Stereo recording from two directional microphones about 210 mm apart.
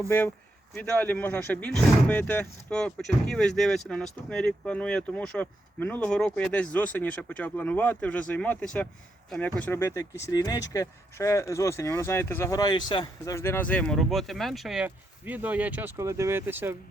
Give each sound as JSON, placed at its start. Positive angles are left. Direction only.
{"t": 0.8, "sound": "speech", "side_deg": 10}